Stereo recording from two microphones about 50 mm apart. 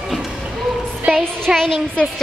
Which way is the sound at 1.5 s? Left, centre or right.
Centre.